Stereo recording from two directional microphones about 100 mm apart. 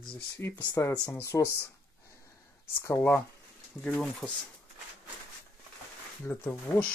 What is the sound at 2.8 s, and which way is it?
Speech, 25° left (ahead or behind).